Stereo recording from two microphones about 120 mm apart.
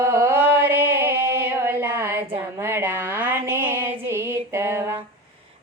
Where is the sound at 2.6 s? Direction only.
20° right (ahead or behind).